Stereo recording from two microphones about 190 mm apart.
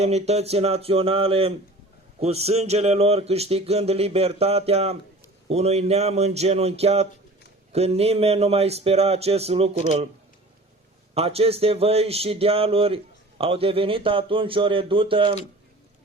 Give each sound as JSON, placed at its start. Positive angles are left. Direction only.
{"t": 0.0, "sound": "speech", "side_deg": -35}
{"t": 11.1, "sound": "a man's voice", "side_deg": -30}